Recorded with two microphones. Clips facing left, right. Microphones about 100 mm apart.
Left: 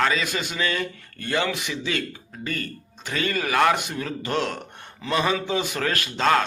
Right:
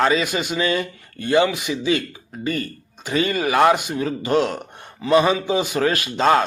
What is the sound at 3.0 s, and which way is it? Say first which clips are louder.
A man's voice: right 5 dB; 15° right (ahead or behind).